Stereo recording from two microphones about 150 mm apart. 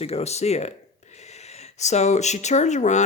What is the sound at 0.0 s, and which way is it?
Speech, 45° left (ahead or behind).